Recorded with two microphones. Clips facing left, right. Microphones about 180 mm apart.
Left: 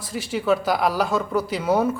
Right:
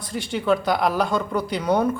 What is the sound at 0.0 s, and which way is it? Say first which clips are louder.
Speech: even; 5° left (ahead or behind).